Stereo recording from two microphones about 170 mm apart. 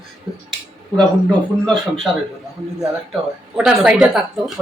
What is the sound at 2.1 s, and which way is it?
Speech, centre (ahead or behind).